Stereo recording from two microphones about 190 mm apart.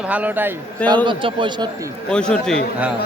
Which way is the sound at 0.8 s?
25° right (ahead or behind).